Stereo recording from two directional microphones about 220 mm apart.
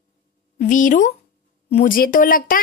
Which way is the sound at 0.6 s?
35° left (ahead or behind).